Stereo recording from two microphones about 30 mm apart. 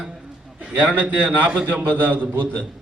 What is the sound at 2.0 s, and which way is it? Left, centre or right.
Speech, right.